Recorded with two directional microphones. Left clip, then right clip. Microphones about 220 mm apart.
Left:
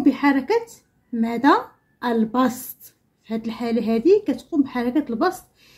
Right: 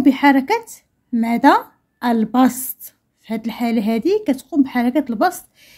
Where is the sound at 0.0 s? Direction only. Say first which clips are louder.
Right 5 dB; 35° right (ahead or behind).